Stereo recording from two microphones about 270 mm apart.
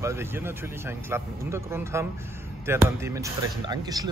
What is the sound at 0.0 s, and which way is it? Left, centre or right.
Speech, centre.